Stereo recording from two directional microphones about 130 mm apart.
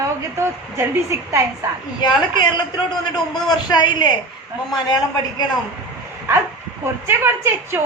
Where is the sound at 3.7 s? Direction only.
35° left (ahead or behind).